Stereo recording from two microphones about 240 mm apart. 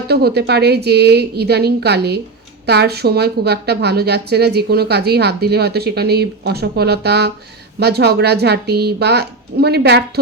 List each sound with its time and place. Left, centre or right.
0.1 s a woman's voice: right